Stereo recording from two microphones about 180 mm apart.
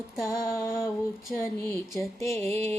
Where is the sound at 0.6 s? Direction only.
15° left (ahead or behind).